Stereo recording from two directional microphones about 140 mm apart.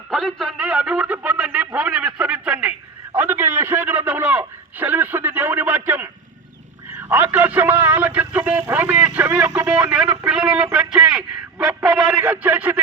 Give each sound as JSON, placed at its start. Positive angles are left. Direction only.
{"t": 0.1, "sound": "speech", "side_deg": 0}
{"t": 7.1, "sound": "speech", "side_deg": -15}